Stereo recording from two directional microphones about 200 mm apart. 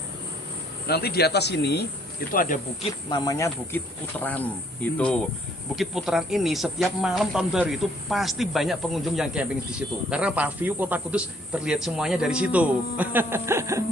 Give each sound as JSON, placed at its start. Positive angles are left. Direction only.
{"t": 0.9, "sound": "speech", "side_deg": 50}
{"t": 2.3, "sound": "speech", "side_deg": 45}
{"t": 3.1, "sound": "a man's voice", "side_deg": 20}